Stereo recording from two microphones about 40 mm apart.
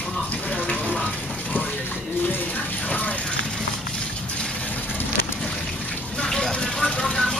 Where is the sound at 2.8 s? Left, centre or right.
Left.